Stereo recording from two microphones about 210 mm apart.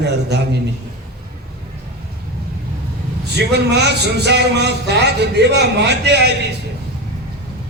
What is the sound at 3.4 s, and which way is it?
Speech, 55° right (ahead or behind).